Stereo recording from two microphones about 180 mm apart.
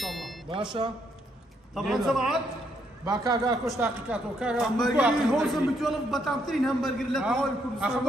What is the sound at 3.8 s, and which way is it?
A man's voice, 5° right (ahead or behind).